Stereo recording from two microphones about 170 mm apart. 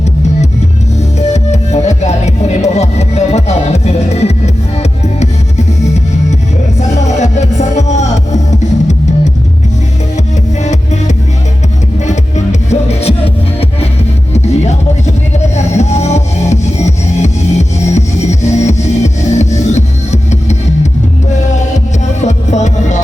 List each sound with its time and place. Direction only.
1.2 s music: 40° left (ahead or behind)
12.0 s music: 40° left (ahead or behind)
22.2 s music: 40° left (ahead or behind)